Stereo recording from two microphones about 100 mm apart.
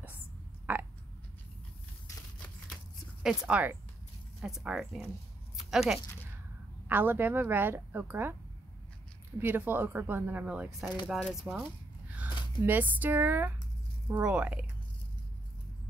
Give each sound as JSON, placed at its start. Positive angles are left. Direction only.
{"t": 0.7, "sound": "a sound", "side_deg": -20}
{"t": 3.2, "sound": "speech", "side_deg": -10}
{"t": 5.6, "sound": "a sound", "side_deg": -5}
{"t": 6.9, "sound": "a woman's voice", "side_deg": -20}
{"t": 9.4, "sound": "a woman's voice", "side_deg": -20}
{"t": 12.6, "sound": "a woman's voice", "side_deg": -15}